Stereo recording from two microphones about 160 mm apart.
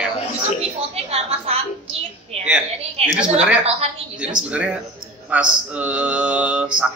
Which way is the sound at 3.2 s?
5° right (ahead or behind).